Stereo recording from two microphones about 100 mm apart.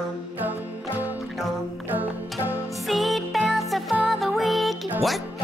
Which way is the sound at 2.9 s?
Centre (ahead or behind).